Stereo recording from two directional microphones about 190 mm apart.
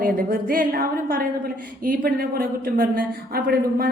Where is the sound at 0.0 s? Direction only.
50° right (ahead or behind).